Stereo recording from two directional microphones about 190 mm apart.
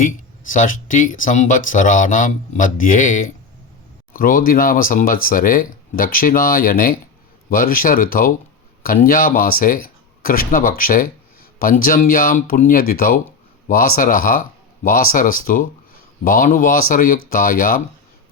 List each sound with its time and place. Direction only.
0.5 s speech: 45° left (ahead or behind)